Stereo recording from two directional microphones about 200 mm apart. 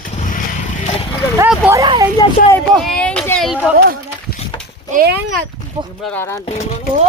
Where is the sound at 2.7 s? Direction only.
5° left (ahead or behind).